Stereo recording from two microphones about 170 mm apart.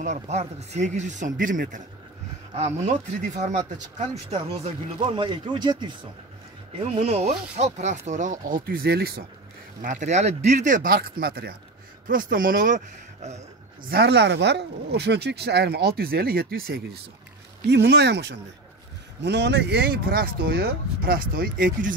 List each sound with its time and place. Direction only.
0.0 s speech: 40° right (ahead or behind)
5.0 s speech: 30° right (ahead or behind)
6.8 s speech: 40° right (ahead or behind); by 9.2 s 65° right (ahead or behind)
9.8 s speech: 50° right (ahead or behind); by 11.5 s 65° right (ahead or behind)
12.1 s speech: 55° right (ahead or behind)
13.8 s speech: 75° right (ahead or behind)
17.6 s speech: 85° right; by 21.9 s 55° right (ahead or behind)